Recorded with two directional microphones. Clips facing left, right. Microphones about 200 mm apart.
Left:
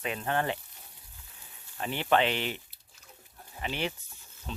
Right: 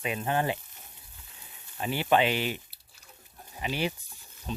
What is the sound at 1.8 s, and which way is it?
Speech, 10° right (ahead or behind).